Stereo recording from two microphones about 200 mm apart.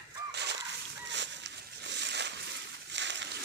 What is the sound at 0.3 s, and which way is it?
Fowl, 60° right (ahead or behind).